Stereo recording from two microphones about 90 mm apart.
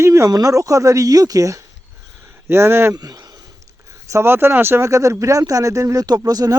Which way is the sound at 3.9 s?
35° right (ahead or behind).